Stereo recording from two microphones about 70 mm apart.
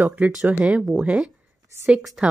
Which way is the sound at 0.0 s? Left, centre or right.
Right.